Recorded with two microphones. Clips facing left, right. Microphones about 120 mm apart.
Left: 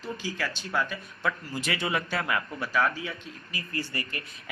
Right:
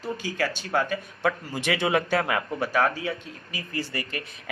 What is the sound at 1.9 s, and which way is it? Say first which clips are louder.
A man's voice: right 5 dB; 45° right (ahead or behind).